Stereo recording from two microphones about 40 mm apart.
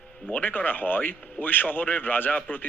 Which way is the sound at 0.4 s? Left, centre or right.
Left.